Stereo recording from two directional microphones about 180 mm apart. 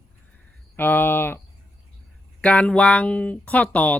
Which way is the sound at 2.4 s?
5° left (ahead or behind).